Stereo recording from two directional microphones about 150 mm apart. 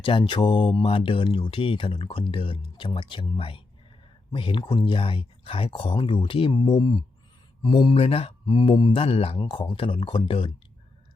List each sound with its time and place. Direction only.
0.0 s speech: 35° left (ahead or behind)